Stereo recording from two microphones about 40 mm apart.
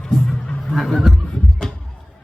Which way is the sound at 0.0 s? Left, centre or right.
Centre.